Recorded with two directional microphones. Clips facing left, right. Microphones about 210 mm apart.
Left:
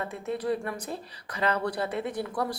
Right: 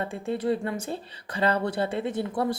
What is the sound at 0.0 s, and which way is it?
A woman's voice, 30° right (ahead or behind).